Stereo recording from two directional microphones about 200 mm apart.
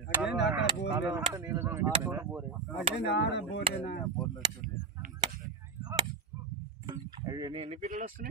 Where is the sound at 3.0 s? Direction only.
60° left (ahead or behind).